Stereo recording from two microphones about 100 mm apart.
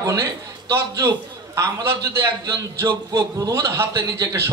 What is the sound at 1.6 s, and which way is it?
A man's voice, 30° right (ahead or behind).